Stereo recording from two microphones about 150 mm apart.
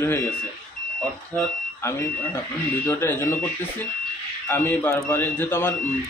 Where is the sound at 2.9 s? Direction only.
15° left (ahead or behind).